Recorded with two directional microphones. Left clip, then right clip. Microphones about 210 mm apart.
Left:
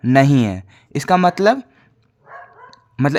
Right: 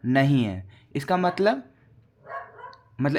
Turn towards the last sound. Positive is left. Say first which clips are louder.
# left 8 dB
turn(degrees=30)  # may be behind; listen again after turning